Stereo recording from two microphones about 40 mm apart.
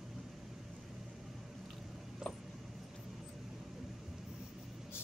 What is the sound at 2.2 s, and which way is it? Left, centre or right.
Vehicle, centre.